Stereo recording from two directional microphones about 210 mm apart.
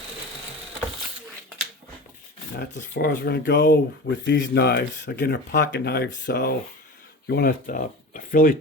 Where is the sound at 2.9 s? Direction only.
50° left (ahead or behind).